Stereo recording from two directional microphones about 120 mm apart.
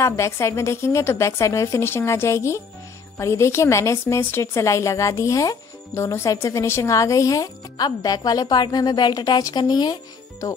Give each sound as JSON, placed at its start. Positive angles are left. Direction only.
{"t": 0.0, "sound": "a woman's voice", "side_deg": 25}